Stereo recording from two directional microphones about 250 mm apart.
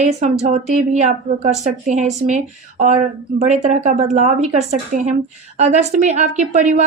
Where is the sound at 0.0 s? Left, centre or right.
Right.